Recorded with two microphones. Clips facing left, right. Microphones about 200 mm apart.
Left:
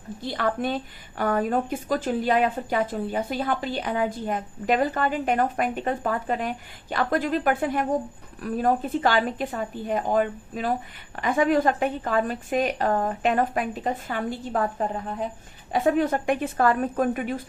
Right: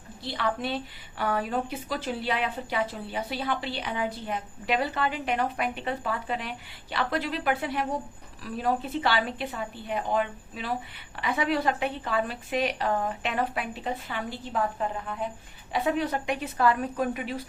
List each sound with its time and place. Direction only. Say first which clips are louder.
0.2 s speech: left 4 dB; 45° left (ahead or behind)